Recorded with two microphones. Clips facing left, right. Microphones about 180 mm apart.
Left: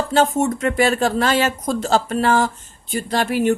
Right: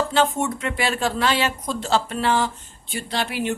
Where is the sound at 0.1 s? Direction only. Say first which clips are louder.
Left 4 dB; 40° left (ahead or behind).